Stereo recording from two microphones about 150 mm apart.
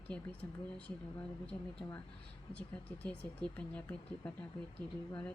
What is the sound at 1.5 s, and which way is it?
Speech, 15° left (ahead or behind).